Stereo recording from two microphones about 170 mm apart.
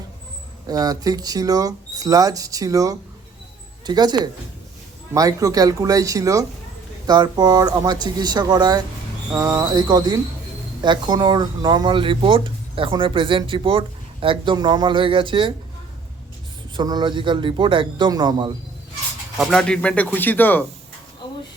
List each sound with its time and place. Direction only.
0.7 s speech: 20° right (ahead or behind)
16.7 s speech: 25° right (ahead or behind)
19.4 s speech: 5° left (ahead or behind)